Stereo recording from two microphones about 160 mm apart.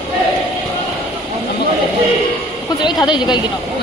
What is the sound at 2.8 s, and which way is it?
Speech, 30° left (ahead or behind).